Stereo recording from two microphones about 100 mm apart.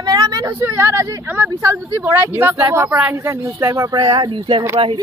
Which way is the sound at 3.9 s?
50° right (ahead or behind).